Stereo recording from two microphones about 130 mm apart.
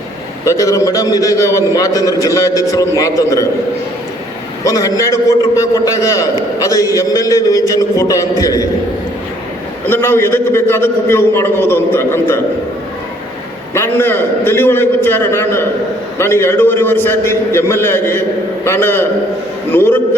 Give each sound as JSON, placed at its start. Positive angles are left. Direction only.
{"t": 0.4, "sound": "a man's voice", "side_deg": 25}
{"t": 4.6, "sound": "a man's voice", "side_deg": 25}
{"t": 9.8, "sound": "a man's voice", "side_deg": 15}
{"t": 13.7, "sound": "a man's voice", "side_deg": 15}